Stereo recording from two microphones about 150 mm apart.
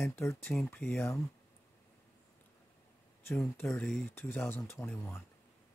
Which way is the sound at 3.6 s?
5° left (ahead or behind).